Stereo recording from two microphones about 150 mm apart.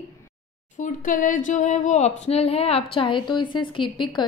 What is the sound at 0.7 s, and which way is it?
A woman's voice, 60° left (ahead or behind).